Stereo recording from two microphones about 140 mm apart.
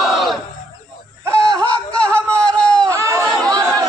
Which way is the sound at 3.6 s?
5° left (ahead or behind).